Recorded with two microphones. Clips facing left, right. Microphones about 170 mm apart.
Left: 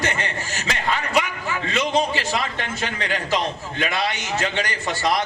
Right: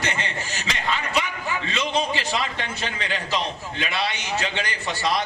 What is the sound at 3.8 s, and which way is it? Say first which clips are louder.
Speech: left 3 dB; 45° left (ahead or behind).